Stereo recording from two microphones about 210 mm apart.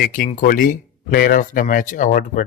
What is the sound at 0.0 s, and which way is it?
Speech, 40° left (ahead or behind).